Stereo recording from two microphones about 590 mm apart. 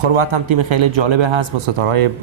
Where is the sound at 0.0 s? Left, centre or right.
Right.